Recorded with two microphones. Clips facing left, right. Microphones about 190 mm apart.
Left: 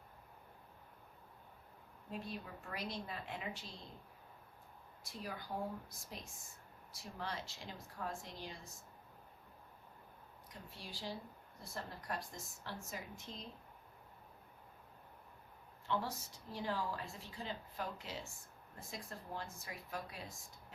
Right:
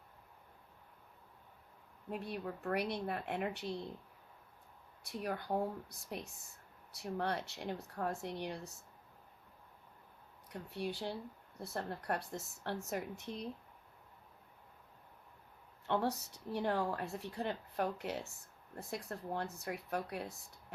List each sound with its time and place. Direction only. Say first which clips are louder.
2.0 s a woman's voice: right 5 dB; 60° right (ahead or behind)
5.0 s a woman's voice: right 7 dB; 60° right (ahead or behind)
10.5 s a woman's voice: right 12 dB; 65° right (ahead or behind)
15.9 s a woman's voice: right 5 dB; 65° right (ahead or behind)